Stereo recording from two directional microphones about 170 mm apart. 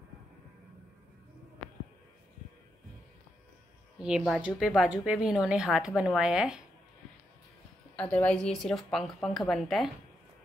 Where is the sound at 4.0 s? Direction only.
5° right (ahead or behind).